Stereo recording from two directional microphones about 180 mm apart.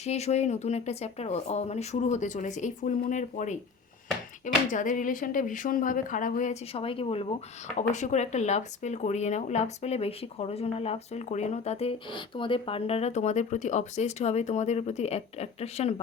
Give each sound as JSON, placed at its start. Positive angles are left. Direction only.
{"t": 0.0, "sound": "speech", "side_deg": 35}
{"t": 6.7, "sound": "speech", "side_deg": 30}